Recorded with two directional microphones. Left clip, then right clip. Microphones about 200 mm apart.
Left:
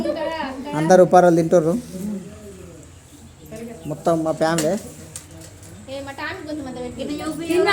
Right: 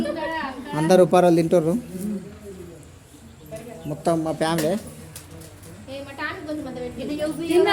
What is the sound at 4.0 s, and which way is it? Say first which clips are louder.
Speech: left 3 dB; centre (ahead or behind).